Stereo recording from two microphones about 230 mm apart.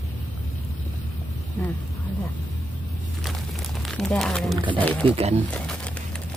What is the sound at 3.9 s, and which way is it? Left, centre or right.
Speech, centre.